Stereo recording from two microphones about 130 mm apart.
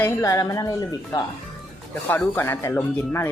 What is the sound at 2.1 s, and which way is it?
Speech, 15° left (ahead or behind).